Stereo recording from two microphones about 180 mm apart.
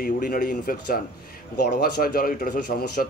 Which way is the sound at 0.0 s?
50° left (ahead or behind).